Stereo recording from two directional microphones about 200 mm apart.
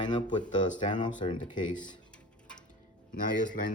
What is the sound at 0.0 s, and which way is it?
Speech, 20° left (ahead or behind).